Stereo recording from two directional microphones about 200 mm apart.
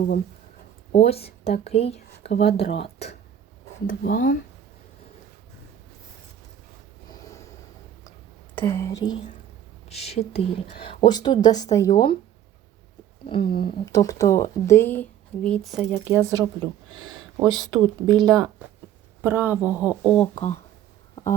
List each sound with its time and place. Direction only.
0.9 s speech: 30° left (ahead or behind)
3.8 s speech: 45° left (ahead or behind)
7.1 s a sound: 15° left (ahead or behind)
8.5 s speech: 10° left (ahead or behind)
9.9 s a woman's voice: 30° left (ahead or behind)
13.6 s speech: 20° left (ahead or behind); by 15.9 s centre (ahead or behind)
16.0 s speech: 15° right (ahead or behind)
20.3 s speech: 30° left (ahead or behind)